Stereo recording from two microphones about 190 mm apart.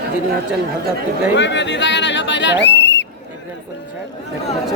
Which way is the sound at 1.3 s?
70° left (ahead or behind).